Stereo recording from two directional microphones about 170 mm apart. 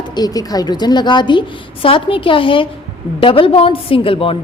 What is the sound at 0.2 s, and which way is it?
A woman's voice, 20° left (ahead or behind).